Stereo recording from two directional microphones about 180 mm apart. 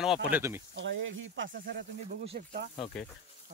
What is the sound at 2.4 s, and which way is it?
Speech, 50° right (ahead or behind).